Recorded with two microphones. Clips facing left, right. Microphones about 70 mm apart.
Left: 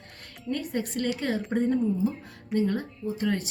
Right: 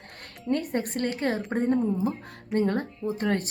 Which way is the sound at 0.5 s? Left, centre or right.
Right.